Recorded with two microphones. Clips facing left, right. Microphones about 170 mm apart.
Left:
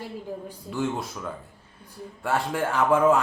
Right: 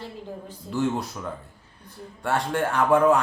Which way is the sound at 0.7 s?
Centre (ahead or behind).